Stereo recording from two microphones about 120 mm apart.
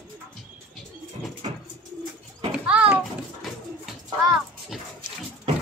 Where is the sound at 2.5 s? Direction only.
10° right (ahead or behind).